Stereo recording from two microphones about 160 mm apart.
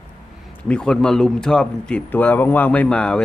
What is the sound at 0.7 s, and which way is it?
A man's voice, 5° left (ahead or behind).